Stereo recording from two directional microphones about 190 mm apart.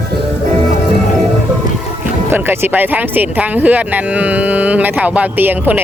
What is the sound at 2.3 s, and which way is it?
Speech, 10° right (ahead or behind).